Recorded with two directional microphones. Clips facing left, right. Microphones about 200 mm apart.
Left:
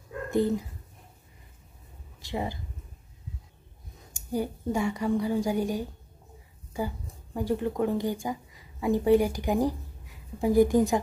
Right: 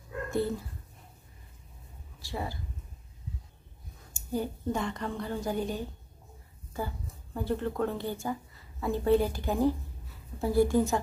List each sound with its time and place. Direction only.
0.3 s speech: 15° left (ahead or behind)
2.2 s speech: 20° left (ahead or behind)
4.1 s a woman's voice: 10° left (ahead or behind)